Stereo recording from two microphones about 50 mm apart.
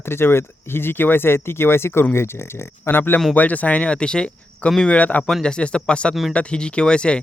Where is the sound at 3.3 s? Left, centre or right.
Left.